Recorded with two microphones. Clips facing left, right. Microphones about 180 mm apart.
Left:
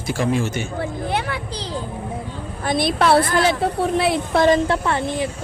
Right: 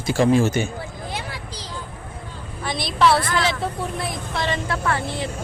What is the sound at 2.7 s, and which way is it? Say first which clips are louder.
A woman's voice: left 2 dB; 55° left (ahead or behind).